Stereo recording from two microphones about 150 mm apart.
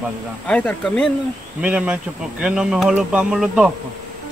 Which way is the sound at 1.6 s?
10° right (ahead or behind).